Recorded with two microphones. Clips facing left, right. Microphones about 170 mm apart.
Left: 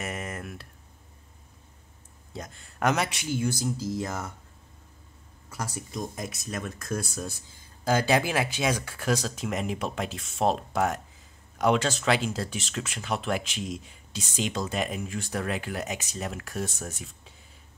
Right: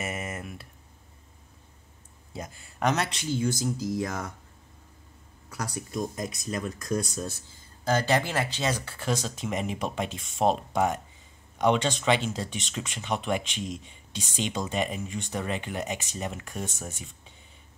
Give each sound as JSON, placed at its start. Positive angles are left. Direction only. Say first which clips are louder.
{"t": 0.0, "sound": "speech", "louder": "right 1 dB", "side_deg": -5}
{"t": 2.3, "sound": "speech", "louder": "right 1 dB", "side_deg": -5}
{"t": 5.7, "sound": "speech", "louder": "right 2 dB", "side_deg": -65}
{"t": 5.9, "sound": "speech", "louder": "right 3 dB", "side_deg": 5}